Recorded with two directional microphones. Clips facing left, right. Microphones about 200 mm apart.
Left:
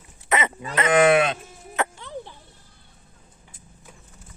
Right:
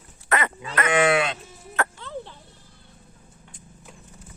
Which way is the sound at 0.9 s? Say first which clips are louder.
Left 4 dB; 50° left (ahead or behind).